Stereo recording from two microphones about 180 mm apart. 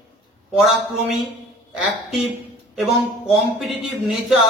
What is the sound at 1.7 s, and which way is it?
A man's voice, centre (ahead or behind).